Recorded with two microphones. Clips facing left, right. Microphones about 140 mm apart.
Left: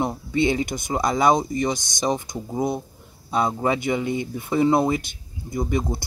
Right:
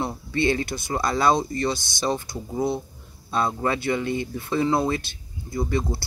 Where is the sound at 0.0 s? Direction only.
15° left (ahead or behind).